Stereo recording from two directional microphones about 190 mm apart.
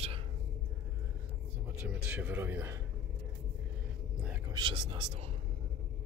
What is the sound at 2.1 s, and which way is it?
Speech, 10° right (ahead or behind).